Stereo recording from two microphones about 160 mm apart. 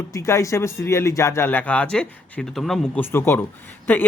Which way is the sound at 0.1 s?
20° left (ahead or behind).